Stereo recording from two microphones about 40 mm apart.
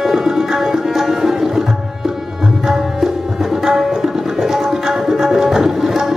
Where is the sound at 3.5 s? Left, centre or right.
Centre.